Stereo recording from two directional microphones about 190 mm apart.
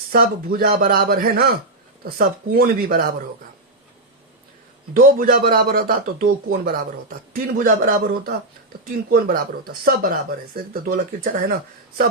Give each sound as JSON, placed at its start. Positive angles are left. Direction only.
{"t": 0.1, "sound": "speech", "side_deg": -50}
{"t": 4.9, "sound": "speech", "side_deg": -50}